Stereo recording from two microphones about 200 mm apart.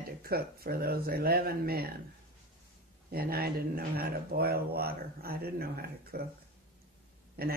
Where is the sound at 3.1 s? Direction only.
50° right (ahead or behind).